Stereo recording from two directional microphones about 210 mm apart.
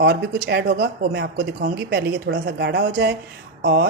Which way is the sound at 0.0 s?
55° right (ahead or behind).